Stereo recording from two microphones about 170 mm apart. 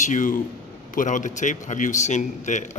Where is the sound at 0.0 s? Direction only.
50° left (ahead or behind).